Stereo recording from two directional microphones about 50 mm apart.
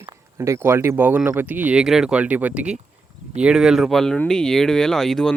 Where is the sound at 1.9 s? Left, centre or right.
Centre.